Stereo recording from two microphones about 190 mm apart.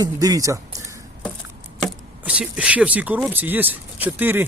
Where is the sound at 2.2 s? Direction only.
5° right (ahead or behind).